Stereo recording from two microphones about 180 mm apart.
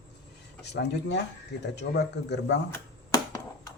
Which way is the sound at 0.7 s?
70° left (ahead or behind).